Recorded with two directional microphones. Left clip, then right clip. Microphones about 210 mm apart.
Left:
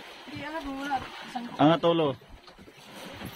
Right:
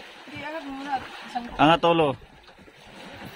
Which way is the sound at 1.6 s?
15° right (ahead or behind).